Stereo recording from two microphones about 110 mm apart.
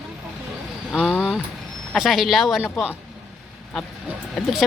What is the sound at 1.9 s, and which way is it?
Speech, centre (ahead or behind).